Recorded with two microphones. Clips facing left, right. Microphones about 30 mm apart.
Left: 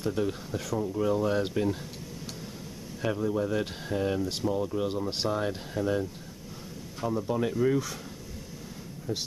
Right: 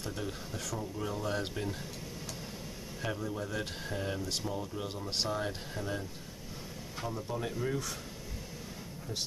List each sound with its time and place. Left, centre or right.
0.0 s speech: centre
3.0 s speech: centre
7.1 s speech: centre